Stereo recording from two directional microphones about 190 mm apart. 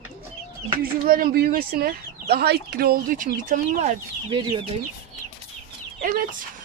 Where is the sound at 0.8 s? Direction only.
50° right (ahead or behind).